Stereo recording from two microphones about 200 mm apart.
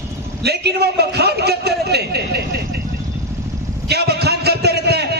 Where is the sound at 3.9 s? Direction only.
55° right (ahead or behind).